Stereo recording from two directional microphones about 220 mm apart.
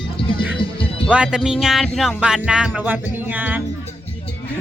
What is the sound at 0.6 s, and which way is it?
Music, 25° left (ahead or behind).